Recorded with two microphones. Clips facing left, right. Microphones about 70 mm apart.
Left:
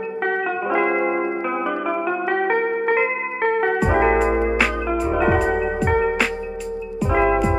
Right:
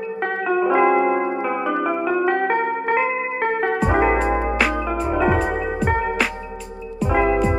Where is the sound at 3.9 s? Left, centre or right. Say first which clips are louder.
Left 1 dB; centre.